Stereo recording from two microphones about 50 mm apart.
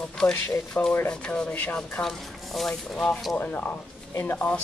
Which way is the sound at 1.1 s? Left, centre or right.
Centre.